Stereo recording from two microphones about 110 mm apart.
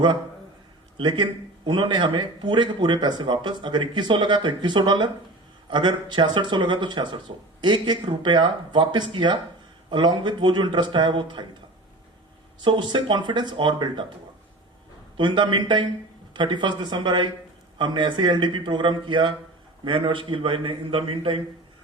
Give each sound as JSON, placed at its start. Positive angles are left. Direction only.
{"t": 0.9, "sound": "speech", "side_deg": -45}
{"t": 12.6, "sound": "speech", "side_deg": -45}
{"t": 15.2, "sound": "speech", "side_deg": -45}